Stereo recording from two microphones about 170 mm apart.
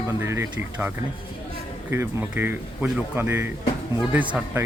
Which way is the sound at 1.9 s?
15° right (ahead or behind).